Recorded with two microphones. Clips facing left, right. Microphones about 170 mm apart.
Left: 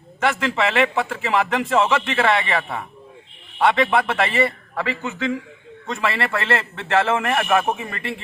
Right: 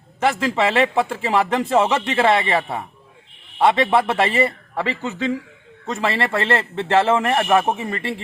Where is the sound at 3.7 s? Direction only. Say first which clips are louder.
Right 2 dB; 30° right (ahead or behind).